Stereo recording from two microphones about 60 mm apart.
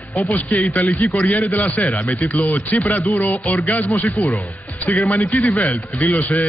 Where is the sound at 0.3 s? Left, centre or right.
Left.